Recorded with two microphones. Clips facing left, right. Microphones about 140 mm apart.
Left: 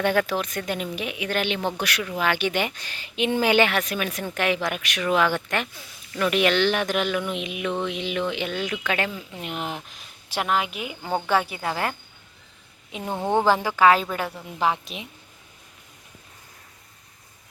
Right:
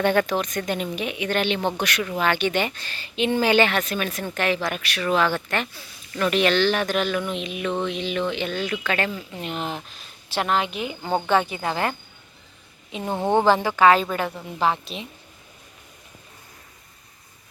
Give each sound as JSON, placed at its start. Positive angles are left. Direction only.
{"t": 0.0, "sound": "speech", "side_deg": 5}
{"t": 13.0, "sound": "speech", "side_deg": -20}
{"t": 13.4, "sound": "speech", "side_deg": 10}